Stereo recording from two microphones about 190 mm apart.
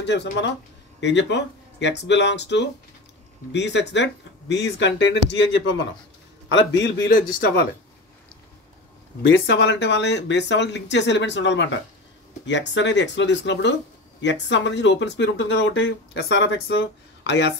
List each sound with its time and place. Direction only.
0.0 s speech: 65° left (ahead or behind)
7.1 s speech: 45° left (ahead or behind)
9.2 s speech: 70° left (ahead or behind)